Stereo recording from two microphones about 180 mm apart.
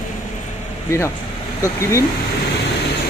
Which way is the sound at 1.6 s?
15° left (ahead or behind).